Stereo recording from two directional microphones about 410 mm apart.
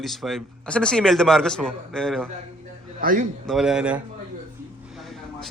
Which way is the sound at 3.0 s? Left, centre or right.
Centre.